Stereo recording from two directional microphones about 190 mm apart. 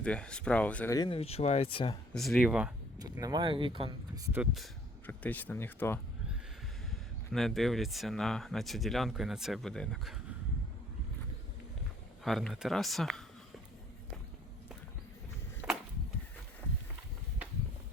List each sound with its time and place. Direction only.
0.0 s speech: 5° left (ahead or behind)
0.9 s speech: 25° left (ahead or behind)
2.1 s speech: centre (ahead or behind)
3.0 s speech: 20° right (ahead or behind)
4.3 s speech: 5° right (ahead or behind); by 6.0 s 10° left (ahead or behind)
7.3 s speech: centre (ahead or behind)
12.2 s speech: centre (ahead or behind)
15.6 s a sound: 10° right (ahead or behind)